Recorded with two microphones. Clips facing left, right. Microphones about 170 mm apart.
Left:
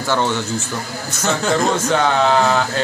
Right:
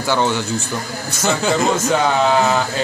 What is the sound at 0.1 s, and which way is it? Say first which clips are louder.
Speech: right 1 dB; 10° right (ahead or behind).